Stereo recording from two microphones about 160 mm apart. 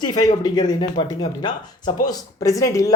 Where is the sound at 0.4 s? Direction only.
25° left (ahead or behind).